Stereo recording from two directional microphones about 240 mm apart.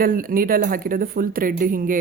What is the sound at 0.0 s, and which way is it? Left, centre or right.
A woman's voice, right.